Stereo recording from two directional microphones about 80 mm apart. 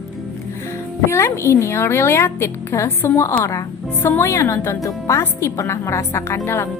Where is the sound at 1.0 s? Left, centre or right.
Left.